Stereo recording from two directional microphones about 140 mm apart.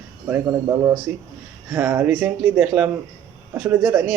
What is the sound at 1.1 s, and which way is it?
A man's voice, 10° right (ahead or behind).